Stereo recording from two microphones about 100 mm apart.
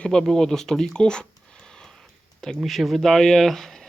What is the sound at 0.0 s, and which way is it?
Speech, 5° left (ahead or behind).